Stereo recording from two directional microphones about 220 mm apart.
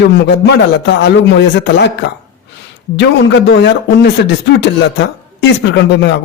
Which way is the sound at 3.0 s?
50° left (ahead or behind).